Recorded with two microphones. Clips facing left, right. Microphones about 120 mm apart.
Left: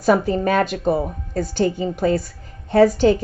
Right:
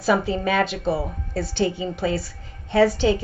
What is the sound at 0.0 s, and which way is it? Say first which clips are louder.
Speech: left 4 dB; 45° left (ahead or behind).